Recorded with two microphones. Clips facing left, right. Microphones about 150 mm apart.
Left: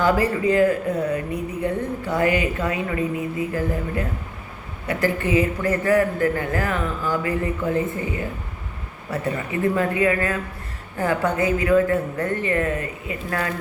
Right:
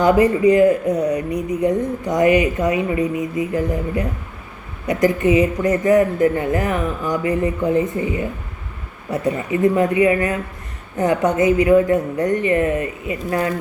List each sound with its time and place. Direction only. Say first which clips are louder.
0.0 s speech: right 6 dB; 20° right (ahead or behind)